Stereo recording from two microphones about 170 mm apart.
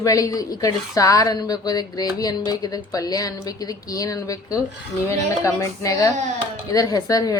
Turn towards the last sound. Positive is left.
turn(degrees=20)  # may be behind; listen again after turning